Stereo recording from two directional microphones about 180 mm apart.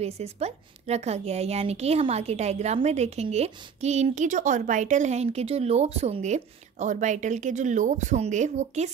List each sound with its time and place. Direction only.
0.0 s a woman's voice: 35° right (ahead or behind)